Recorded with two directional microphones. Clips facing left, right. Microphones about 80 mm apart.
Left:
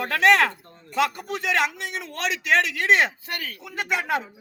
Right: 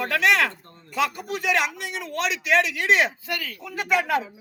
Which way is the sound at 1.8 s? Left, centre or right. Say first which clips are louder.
Right 1 dB; left.